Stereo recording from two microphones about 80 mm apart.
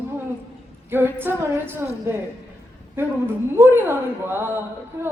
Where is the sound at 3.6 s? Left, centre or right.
Right.